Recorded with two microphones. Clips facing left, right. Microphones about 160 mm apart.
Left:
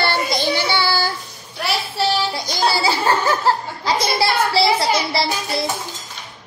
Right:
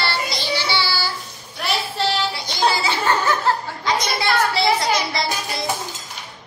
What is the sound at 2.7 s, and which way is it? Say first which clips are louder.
Snicker: left 3 dB; 35° left (ahead or behind).